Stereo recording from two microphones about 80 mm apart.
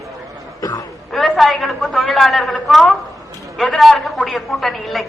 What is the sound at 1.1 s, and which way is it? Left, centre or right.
A woman's voice, centre.